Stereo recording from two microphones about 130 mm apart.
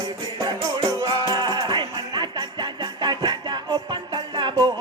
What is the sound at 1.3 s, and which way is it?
Jingle bell, 35° right (ahead or behind).